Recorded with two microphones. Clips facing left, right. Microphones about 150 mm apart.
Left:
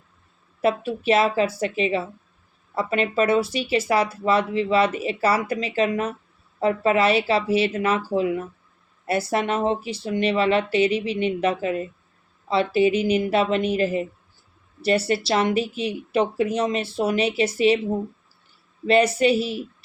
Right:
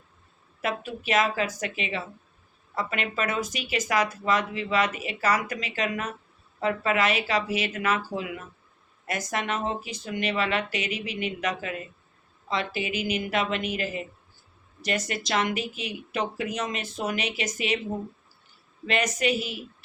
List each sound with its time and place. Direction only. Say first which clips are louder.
0.6 s speech: left 9 dB; 30° left (ahead or behind)
18.9 s speech: left 8 dB; 30° left (ahead or behind)